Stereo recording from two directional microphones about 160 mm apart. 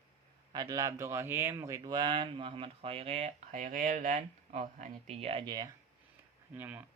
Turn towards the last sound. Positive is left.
turn(degrees=-10)  # may be behind; listen again after turning